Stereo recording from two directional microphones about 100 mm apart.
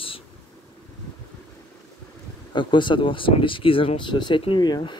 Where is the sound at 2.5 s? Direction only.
50° left (ahead or behind).